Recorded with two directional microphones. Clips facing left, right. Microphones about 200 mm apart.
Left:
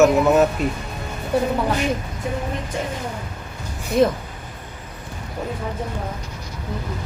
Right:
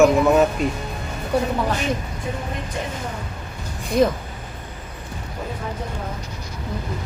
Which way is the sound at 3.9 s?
Centre (ahead or behind).